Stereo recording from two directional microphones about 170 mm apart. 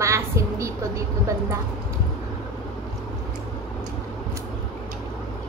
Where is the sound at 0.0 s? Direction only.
15° right (ahead or behind).